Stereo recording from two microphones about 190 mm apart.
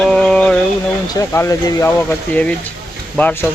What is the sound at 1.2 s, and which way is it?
Speech, 15° left (ahead or behind).